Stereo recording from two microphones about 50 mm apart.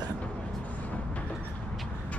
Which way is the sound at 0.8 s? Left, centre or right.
Left.